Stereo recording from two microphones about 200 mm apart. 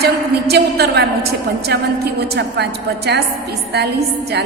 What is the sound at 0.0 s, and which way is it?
A woman's voice, 55° right (ahead or behind).